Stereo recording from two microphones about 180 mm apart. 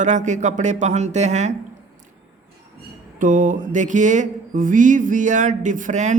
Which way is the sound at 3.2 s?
45° right (ahead or behind).